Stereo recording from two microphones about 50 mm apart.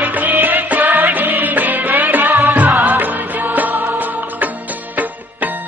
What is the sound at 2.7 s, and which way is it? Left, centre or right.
Music, right.